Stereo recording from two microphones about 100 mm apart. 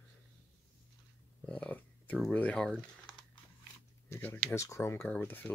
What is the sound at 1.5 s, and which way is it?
Speech, 15° left (ahead or behind).